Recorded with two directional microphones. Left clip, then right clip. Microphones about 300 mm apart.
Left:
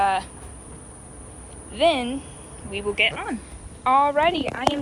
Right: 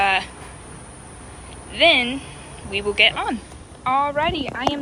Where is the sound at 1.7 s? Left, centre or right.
Centre.